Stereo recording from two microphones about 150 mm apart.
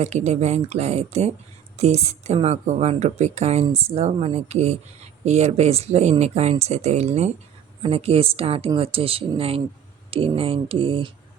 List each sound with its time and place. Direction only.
0.0 s speech: 50° right (ahead or behind)